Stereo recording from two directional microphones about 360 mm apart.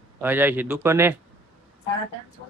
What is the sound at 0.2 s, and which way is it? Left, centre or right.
Speech, centre.